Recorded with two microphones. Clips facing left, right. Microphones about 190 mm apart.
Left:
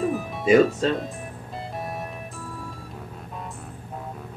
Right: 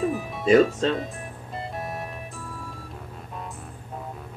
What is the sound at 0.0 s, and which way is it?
Music, centre (ahead or behind).